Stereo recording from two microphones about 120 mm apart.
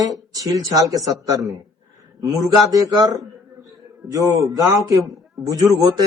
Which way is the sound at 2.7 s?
30° right (ahead or behind).